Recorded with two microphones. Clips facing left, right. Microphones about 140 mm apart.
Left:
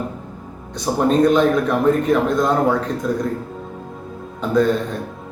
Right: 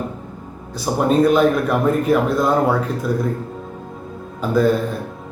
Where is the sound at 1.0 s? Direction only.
5° right (ahead or behind).